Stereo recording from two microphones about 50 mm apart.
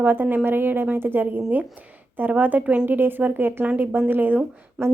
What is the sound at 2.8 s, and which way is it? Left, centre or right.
A woman's voice, right.